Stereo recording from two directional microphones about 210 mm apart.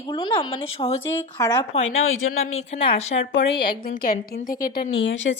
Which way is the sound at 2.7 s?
30° left (ahead or behind).